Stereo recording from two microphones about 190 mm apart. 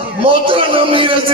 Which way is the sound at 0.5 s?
30° right (ahead or behind).